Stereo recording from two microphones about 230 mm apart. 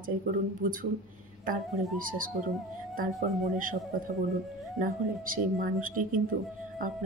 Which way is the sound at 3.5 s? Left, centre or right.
Right.